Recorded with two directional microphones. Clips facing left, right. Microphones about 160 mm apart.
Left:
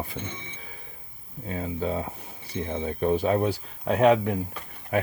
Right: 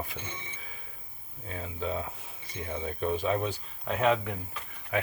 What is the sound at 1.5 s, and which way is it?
Speech, 35° left (ahead or behind).